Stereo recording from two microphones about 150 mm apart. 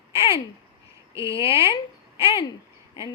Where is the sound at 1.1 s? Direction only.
20° right (ahead or behind).